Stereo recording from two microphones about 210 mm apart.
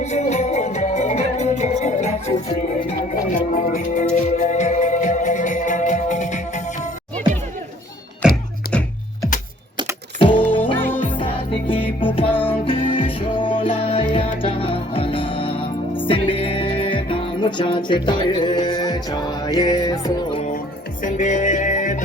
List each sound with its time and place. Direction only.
0.0 s music: 35° left (ahead or behind)
8.2 s music: 5° right (ahead or behind)
10.2 s music: 25° left (ahead or behind)
10.8 s music: 10° left (ahead or behind)
11.2 s music: 25° left (ahead or behind)
21.0 s music: 35° left (ahead or behind)